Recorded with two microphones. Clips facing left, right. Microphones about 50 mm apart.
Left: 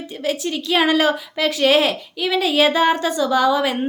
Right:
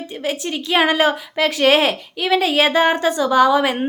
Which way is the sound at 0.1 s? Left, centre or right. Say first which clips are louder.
Left 1 dB; right.